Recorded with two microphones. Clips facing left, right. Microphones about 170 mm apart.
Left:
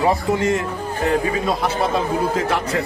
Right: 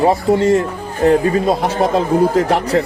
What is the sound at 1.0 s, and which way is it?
Speech, 40° right (ahead or behind).